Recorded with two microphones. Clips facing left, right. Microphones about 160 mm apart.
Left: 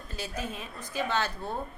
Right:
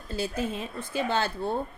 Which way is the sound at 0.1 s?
30° right (ahead or behind).